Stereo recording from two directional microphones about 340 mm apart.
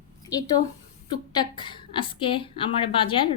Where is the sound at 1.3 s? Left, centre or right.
Centre.